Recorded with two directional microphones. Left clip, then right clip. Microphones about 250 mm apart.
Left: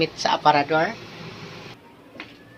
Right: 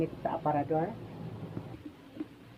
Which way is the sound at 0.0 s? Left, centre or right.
Left.